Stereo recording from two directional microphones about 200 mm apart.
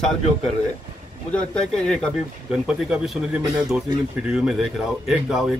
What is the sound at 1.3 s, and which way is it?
Speech, 5° left (ahead or behind).